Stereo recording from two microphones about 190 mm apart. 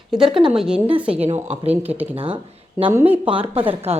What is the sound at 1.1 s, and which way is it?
A woman's voice, 30° right (ahead or behind).